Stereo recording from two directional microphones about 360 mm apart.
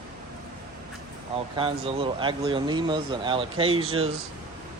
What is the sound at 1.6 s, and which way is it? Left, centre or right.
Speech, centre.